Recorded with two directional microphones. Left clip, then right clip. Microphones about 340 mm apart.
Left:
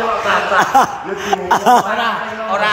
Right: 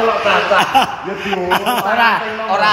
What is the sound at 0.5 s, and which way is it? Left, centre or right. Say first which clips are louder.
Speech: left 1 dB; centre.